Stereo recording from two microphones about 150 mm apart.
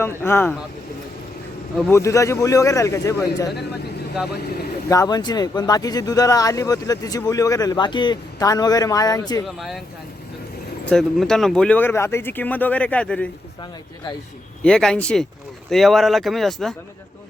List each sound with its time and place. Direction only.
0.0 s speech: 15° left (ahead or behind)
1.9 s speech: 20° left (ahead or behind)
4.9 s speech: 25° left (ahead or behind)
9.6 s speech: centre (ahead or behind)
10.8 s speech: 5° left (ahead or behind)
14.6 s speech: 5° left (ahead or behind)